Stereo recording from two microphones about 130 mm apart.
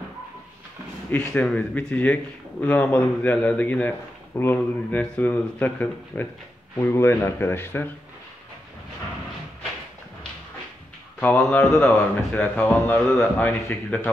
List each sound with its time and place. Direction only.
1.1 s speech: 10° left (ahead or behind)
11.1 s speech: 10° left (ahead or behind)